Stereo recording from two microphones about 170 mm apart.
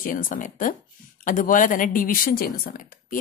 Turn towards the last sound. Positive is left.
turn(degrees=55)  # may be behind; listen again after turning